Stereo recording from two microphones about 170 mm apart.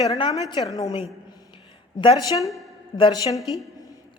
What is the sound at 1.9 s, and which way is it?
A woman's voice, 25° left (ahead or behind).